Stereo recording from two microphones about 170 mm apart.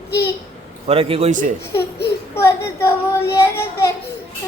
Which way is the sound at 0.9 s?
35° right (ahead or behind).